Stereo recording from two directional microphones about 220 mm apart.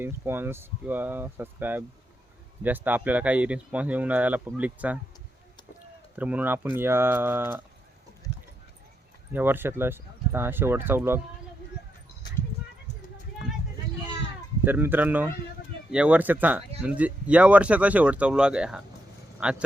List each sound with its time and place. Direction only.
0.0 s speech: 10° right (ahead or behind)
6.1 s speech: 5° right (ahead or behind)
9.3 s speech: 10° right (ahead or behind)
14.6 s speech: 10° right (ahead or behind)